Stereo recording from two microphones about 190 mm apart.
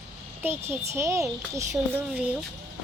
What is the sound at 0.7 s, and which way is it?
Speech, 15° right (ahead or behind).